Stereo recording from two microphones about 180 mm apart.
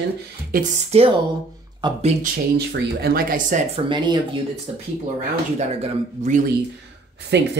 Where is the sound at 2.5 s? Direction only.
65° right (ahead or behind); by 3.8 s 45° right (ahead or behind).